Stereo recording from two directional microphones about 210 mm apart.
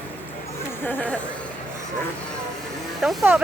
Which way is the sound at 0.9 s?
5° left (ahead or behind).